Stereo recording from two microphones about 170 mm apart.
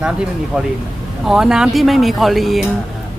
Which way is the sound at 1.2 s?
5° right (ahead or behind).